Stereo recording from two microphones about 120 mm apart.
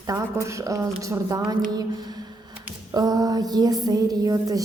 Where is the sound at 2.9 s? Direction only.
30° right (ahead or behind).